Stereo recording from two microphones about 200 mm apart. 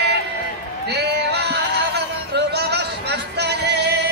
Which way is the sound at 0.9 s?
55° right (ahead or behind).